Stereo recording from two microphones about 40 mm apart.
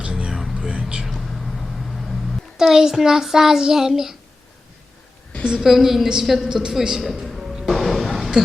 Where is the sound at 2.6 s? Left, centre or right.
Centre.